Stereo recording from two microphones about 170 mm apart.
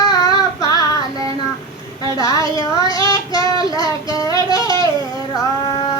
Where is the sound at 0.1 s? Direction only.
20° left (ahead or behind).